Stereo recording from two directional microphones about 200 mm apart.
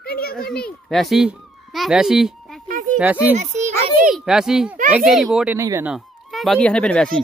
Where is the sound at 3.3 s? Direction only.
35° right (ahead or behind).